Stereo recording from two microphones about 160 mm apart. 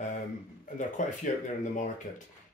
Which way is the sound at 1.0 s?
55° left (ahead or behind).